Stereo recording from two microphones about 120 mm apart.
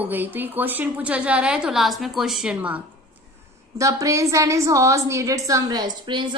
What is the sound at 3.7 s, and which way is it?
A woman's voice, 25° right (ahead or behind).